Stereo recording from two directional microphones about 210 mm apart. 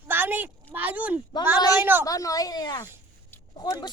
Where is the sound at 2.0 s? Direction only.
15° left (ahead or behind).